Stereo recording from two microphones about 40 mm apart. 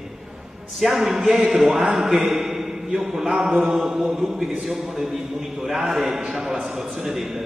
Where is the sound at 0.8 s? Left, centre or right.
Centre.